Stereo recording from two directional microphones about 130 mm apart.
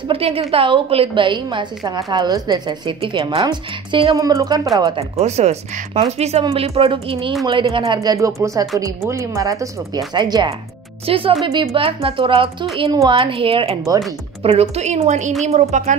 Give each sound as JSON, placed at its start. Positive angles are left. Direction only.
{"t": 0.1, "sound": "a woman's voice", "side_deg": -50}
{"t": 4.9, "sound": "a woman's voice", "side_deg": -55}